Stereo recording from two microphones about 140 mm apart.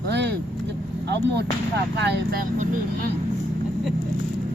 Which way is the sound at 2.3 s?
80° right.